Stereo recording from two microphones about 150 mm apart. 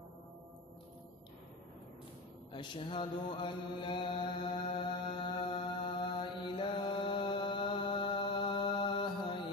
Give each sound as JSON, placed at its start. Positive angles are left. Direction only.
{"t": 2.5, "sound": "mantra", "side_deg": 35}